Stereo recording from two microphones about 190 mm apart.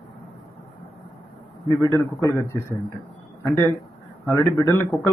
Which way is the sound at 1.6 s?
15° left (ahead or behind).